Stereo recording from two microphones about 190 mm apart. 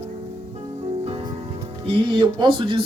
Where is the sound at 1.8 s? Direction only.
25° right (ahead or behind).